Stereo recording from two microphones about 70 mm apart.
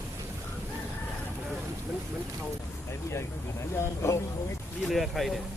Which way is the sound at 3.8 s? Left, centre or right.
Left.